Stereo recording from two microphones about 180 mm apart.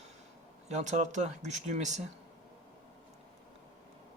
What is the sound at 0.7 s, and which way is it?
Speech, 40° right (ahead or behind).